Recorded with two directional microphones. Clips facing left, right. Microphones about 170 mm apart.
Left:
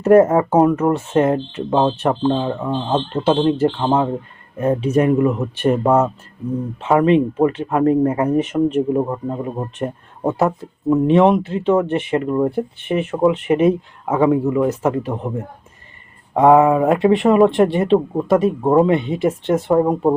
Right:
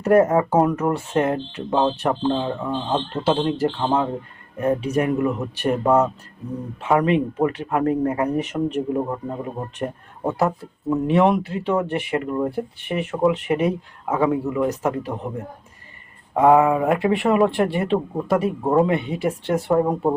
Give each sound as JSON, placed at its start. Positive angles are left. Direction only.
{"t": 0.0, "sound": "speech", "side_deg": 25}
{"t": 16.3, "sound": "speech", "side_deg": 25}